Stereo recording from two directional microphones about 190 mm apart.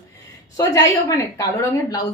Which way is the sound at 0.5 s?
15° left (ahead or behind).